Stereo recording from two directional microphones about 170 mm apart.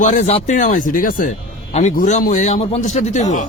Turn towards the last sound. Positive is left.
turn(degrees=45)  # may be behind; listen again after turning